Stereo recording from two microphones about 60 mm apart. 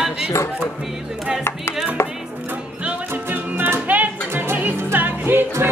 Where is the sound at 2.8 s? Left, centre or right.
Right.